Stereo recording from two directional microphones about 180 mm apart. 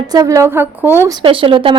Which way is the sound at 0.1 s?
20° right (ahead or behind).